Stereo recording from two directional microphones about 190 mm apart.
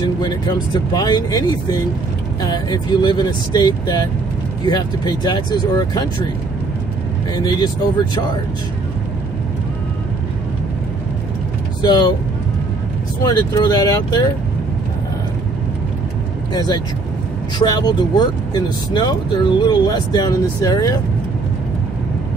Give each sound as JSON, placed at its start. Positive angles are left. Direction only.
{"t": 0.0, "sound": "speech", "side_deg": 20}
{"t": 7.3, "sound": "speech", "side_deg": 20}
{"t": 11.8, "sound": "speech", "side_deg": 20}
{"t": 13.2, "sound": "speech", "side_deg": 20}
{"t": 16.5, "sound": "speech", "side_deg": 20}